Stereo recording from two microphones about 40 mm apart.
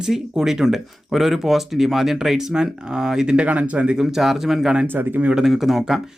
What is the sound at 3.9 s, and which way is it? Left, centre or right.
Speech, centre.